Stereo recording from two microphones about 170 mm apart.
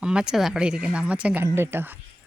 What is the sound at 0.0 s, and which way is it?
Speech, 5° right (ahead or behind).